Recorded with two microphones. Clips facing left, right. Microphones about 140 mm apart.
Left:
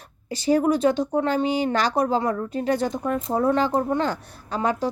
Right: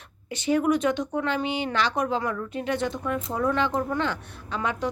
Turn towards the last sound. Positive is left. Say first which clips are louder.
# left 4 dB
turn(degrees=35)  # may be behind; listen again after turning